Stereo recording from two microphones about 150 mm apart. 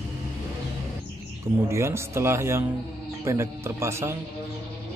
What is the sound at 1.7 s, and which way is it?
Speech, 15° right (ahead or behind).